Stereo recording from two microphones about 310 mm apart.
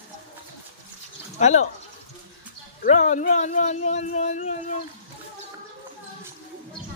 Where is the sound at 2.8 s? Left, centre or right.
Left.